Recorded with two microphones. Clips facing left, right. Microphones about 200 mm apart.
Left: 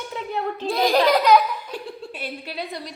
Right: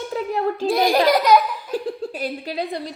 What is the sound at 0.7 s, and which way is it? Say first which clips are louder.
Speech: right 1 dB; 10° right (ahead or behind).